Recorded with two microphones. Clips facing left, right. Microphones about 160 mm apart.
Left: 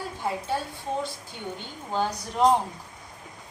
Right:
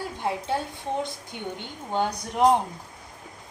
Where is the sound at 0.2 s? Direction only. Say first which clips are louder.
Right 1 dB; 20° right (ahead or behind).